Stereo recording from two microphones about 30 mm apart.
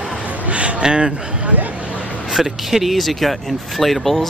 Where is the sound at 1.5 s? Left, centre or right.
Right.